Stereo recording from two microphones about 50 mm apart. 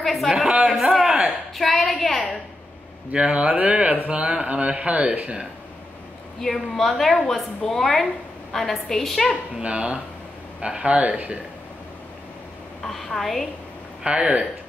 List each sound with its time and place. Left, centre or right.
0.0 s a woman's voice: centre
1.0 s a sound: centre
1.6 s a woman's voice: centre
3.1 s speech: right
6.4 s a woman's voice: centre
9.6 s speech: right
12.8 s a woman's voice: centre
14.0 s speech: right